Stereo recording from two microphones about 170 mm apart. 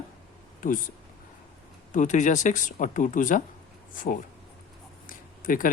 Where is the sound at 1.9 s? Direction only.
45° left (ahead or behind).